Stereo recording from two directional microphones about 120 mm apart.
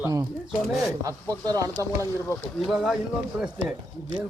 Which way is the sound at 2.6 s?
Centre (ahead or behind).